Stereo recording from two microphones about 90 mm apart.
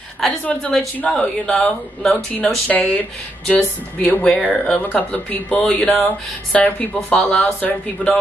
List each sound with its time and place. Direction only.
0.5 s speech: 10° left (ahead or behind)
2.7 s speech: 20° left (ahead or behind)